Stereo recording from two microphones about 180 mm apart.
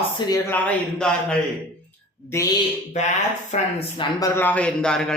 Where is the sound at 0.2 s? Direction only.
25° left (ahead or behind).